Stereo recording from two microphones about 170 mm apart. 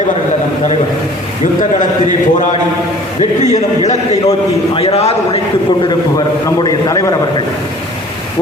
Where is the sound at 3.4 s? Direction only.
45° left (ahead or behind).